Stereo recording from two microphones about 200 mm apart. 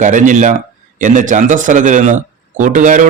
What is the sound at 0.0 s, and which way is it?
A man's voice, 40° right (ahead or behind).